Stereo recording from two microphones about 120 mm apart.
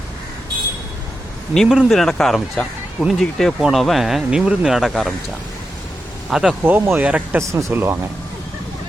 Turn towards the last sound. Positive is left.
turn(degrees=-20)  # may be behind; listen again after turning